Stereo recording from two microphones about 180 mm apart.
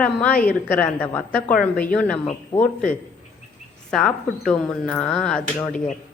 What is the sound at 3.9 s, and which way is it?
Speech, 5° left (ahead or behind).